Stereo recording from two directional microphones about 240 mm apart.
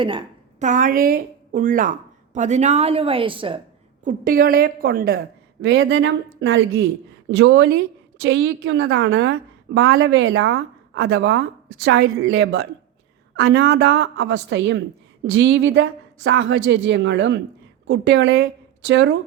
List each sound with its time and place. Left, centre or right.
0.0 s a sound: right
0.7 s a woman's voice: right
4.0 s a woman's voice: right